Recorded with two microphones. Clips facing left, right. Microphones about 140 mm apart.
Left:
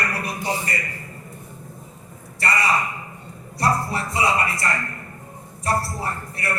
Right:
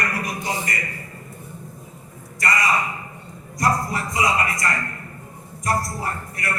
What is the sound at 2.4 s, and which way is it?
A man's voice, 30° left (ahead or behind).